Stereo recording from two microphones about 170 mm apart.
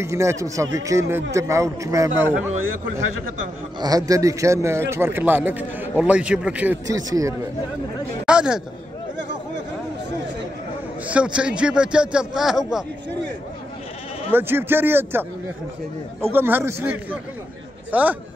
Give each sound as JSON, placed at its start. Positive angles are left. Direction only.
{"t": 0.0, "sound": "a man's voice", "side_deg": -15}
{"t": 3.8, "sound": "a man's voice", "side_deg": -20}
{"t": 6.9, "sound": "a man's voice", "side_deg": -20}
{"t": 8.3, "sound": "speech", "side_deg": -5}
{"t": 11.1, "sound": "a man's voice", "side_deg": -5}
{"t": 14.3, "sound": "a man's voice", "side_deg": -10}